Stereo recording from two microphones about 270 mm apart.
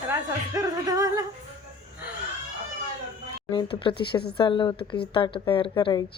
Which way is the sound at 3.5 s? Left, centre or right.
Centre.